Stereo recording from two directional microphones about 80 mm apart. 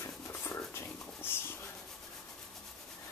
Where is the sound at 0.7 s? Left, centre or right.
Left.